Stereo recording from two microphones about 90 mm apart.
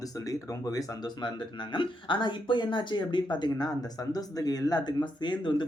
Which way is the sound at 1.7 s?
65° left (ahead or behind).